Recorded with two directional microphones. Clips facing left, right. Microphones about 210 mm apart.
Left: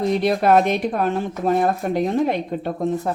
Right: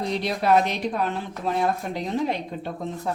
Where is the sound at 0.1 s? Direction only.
55° left (ahead or behind).